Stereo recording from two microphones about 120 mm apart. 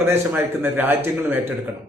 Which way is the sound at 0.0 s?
20° right (ahead or behind).